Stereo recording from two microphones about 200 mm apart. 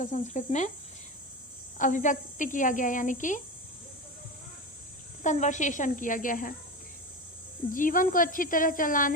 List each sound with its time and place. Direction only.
0.0 s speech: 35° left (ahead or behind)
1.8 s speech: 40° left (ahead or behind)
5.2 s speech: 35° left (ahead or behind)
7.7 s speech: 40° left (ahead or behind)